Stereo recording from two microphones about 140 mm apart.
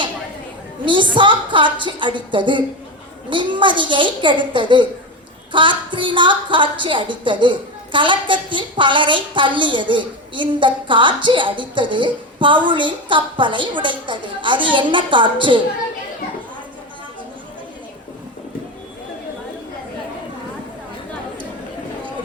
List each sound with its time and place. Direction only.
1.1 s a woman's voice: 35° right (ahead or behind)